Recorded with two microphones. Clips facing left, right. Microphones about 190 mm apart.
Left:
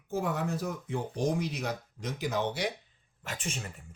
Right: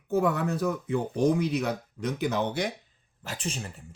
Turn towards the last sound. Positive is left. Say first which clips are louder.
# right 3 dB
turn(degrees=-35)  # may be behind; listen again after turning